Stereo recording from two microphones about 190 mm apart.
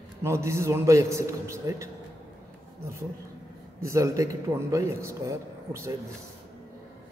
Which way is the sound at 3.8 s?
15° right (ahead or behind).